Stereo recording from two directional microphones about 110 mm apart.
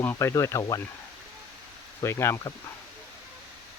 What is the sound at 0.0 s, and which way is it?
Speech, 20° left (ahead or behind).